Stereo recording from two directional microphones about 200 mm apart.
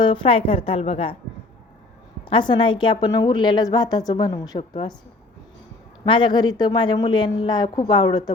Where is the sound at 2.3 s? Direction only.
25° left (ahead or behind).